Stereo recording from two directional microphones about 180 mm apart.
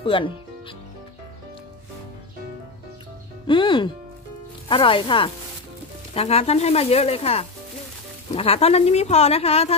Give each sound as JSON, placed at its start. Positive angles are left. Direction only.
{"t": 0.0, "sound": "speech", "side_deg": 30}
{"t": 3.4, "sound": "speech", "side_deg": 25}